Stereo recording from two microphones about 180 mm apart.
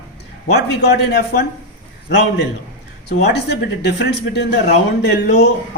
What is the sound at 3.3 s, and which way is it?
Speech, 70° left (ahead or behind).